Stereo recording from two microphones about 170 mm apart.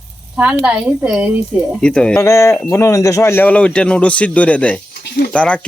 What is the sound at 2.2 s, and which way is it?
Speech, 15° left (ahead or behind).